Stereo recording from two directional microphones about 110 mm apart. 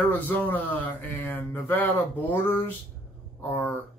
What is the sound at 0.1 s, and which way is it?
Speech, 15° left (ahead or behind).